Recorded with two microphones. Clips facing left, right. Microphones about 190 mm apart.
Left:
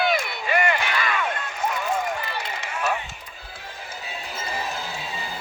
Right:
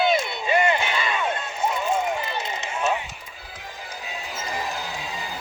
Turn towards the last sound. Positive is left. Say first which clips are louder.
# even
turn(degrees=-15)  # may be behind; listen again after turning